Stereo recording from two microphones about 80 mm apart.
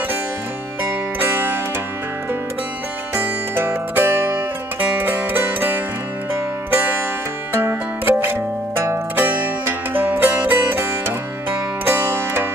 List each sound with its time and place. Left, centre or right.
1.2 s music: right
3.5 s music: right
8.0 s zither: right